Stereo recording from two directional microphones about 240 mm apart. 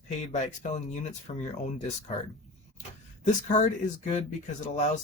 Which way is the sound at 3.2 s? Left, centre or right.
Left.